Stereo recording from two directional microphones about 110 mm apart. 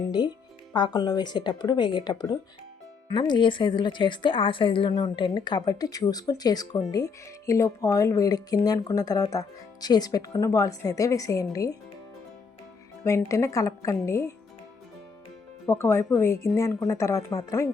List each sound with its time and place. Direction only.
0.1 s a woman's voice: 40° left (ahead or behind)
13.1 s speech: 25° left (ahead or behind)
15.6 s speech: 20° left (ahead or behind)